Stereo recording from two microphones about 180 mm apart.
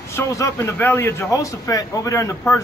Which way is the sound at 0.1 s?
15° left (ahead or behind).